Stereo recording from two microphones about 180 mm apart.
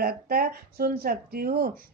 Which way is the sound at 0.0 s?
55° right (ahead or behind).